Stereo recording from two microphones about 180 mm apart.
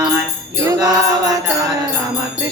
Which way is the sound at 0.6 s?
20° right (ahead or behind).